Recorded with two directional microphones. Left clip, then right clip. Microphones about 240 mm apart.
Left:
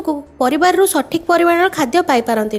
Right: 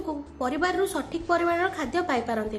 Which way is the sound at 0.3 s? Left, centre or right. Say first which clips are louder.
Left 13 dB; left.